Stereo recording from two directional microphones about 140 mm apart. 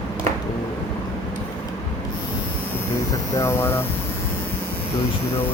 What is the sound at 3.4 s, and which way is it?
Speech, 20° left (ahead or behind).